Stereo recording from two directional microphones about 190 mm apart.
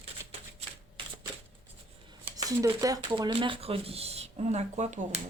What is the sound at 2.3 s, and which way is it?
Speech, 15° right (ahead or behind).